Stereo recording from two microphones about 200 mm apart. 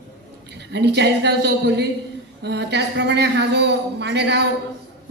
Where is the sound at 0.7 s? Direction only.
60° right (ahead or behind).